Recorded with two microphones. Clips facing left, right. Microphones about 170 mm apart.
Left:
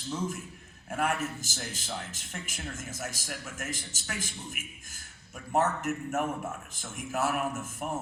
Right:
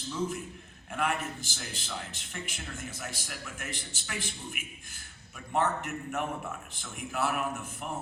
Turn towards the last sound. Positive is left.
turn(degrees=45)  # may be behind; listen again after turning